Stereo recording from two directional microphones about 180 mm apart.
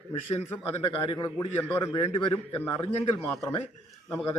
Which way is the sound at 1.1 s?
15° left (ahead or behind).